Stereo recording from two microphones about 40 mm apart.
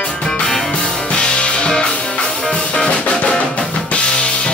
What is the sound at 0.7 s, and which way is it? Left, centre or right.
Music, left.